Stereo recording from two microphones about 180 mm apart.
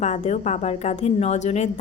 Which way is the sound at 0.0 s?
40° left (ahead or behind).